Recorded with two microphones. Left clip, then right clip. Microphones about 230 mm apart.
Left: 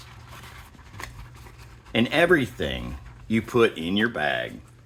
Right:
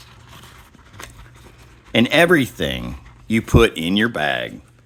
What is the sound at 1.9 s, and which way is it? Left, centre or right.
Speech, right.